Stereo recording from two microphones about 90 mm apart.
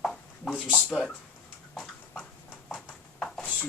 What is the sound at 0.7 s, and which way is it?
Speech, 15° left (ahead or behind).